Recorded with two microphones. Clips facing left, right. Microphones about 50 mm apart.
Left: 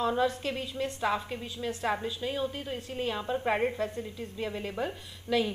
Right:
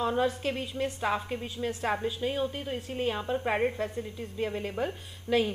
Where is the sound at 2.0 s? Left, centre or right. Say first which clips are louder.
Right 2 dB; right.